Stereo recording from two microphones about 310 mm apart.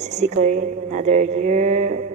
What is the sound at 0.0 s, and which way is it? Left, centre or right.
Speech, right.